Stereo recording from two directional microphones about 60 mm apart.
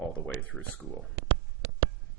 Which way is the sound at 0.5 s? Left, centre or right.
Centre.